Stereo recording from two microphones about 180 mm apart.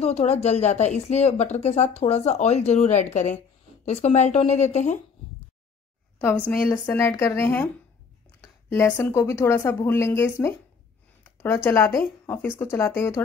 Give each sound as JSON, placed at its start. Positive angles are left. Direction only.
{"t": 0.0, "sound": "speech", "side_deg": 35}
{"t": 6.1, "sound": "speech", "side_deg": 10}